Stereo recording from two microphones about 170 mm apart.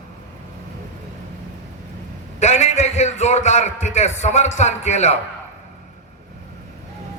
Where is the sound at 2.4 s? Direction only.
40° left (ahead or behind).